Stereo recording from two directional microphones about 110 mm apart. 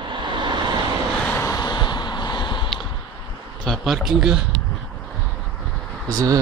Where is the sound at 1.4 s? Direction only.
30° left (ahead or behind).